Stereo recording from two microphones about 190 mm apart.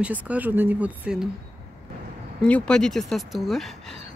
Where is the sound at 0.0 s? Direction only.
10° right (ahead or behind).